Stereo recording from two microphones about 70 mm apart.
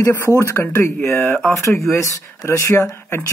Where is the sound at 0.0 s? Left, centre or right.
Left.